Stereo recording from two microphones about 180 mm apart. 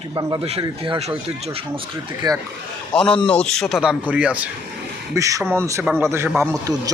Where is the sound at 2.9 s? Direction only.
5° left (ahead or behind).